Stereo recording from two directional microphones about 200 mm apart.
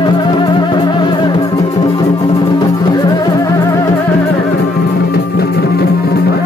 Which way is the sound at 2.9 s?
20° left (ahead or behind).